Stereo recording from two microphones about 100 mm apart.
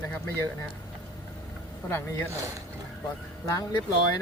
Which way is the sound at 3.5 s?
35° left (ahead or behind).